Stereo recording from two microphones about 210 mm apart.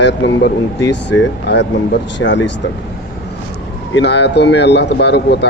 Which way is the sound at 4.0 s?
55° left (ahead or behind).